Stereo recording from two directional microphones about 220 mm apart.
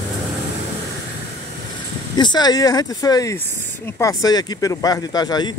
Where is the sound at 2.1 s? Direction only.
20° left (ahead or behind).